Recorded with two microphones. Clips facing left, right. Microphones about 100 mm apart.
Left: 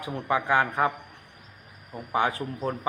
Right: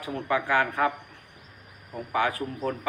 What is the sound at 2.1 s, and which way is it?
Speech, 25° left (ahead or behind).